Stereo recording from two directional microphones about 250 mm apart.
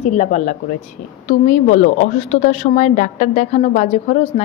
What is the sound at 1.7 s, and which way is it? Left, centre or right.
A woman's voice, left.